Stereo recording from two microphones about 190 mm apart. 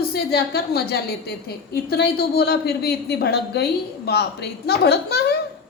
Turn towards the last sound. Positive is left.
turn(degrees=60)  # may be behind; listen again after turning